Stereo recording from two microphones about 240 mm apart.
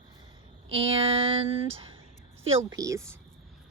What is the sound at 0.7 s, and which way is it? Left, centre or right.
Speech, right.